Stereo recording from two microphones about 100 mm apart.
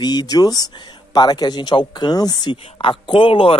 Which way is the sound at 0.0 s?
40° left (ahead or behind).